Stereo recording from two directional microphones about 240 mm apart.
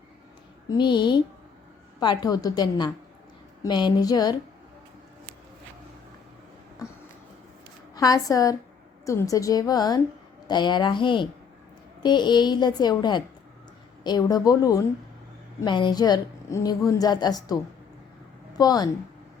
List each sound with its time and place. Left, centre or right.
0.7 s a woman's voice: centre
7.9 s a woman's voice: centre